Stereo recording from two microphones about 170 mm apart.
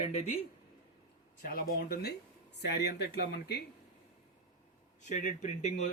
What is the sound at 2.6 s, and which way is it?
Speech, 75° left (ahead or behind).